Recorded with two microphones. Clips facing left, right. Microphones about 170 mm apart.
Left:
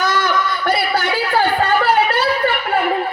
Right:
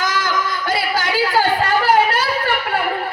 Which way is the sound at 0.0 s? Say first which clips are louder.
Left 3 dB; 90° right.